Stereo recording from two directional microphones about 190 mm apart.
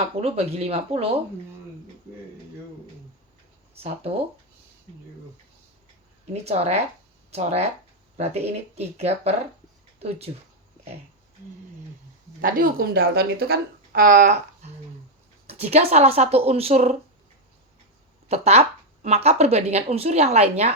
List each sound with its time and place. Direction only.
0.2 s a woman's voice: 35° right (ahead or behind)
6.3 s a woman's voice: 35° right (ahead or behind)
12.4 s a woman's voice: 50° right (ahead or behind)
18.3 s a woman's voice: 35° right (ahead or behind)